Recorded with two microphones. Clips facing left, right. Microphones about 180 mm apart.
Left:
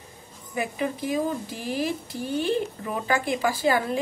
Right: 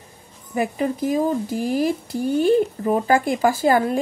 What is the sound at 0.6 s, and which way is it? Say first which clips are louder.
Speech: right 6 dB; 45° right (ahead or behind).